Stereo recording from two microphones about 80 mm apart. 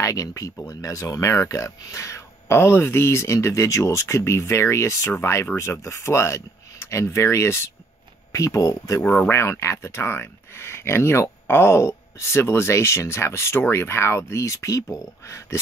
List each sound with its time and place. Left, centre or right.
0.0 s speech: left
9.0 s speech: centre
9.3 s speech: left